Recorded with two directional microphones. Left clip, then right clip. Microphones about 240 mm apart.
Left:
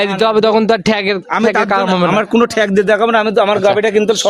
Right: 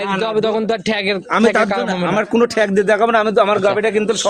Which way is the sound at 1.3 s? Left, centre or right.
Centre.